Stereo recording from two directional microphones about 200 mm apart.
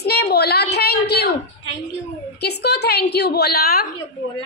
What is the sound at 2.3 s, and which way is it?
A woman's voice, 55° left (ahead or behind).